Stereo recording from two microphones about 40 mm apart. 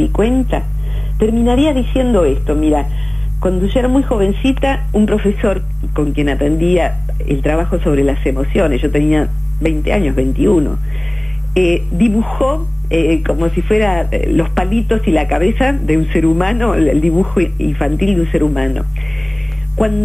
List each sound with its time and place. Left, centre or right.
0.0 s speech: centre
16.8 s speech: centre
17.3 s speech: centre